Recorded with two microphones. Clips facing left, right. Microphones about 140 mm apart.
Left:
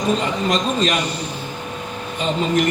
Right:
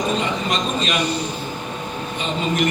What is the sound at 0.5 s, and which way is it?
Speech, 40° left (ahead or behind).